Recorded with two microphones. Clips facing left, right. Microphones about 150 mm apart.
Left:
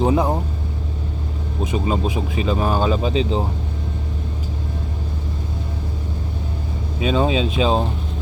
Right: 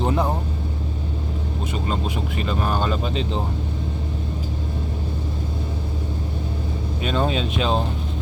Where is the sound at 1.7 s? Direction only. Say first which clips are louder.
Left 5 dB; 10° left (ahead or behind).